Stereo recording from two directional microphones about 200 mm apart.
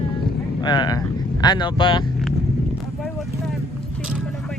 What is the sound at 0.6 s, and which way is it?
Speech, 20° left (ahead or behind).